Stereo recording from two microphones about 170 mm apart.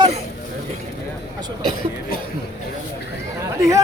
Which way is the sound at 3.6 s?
20° right (ahead or behind).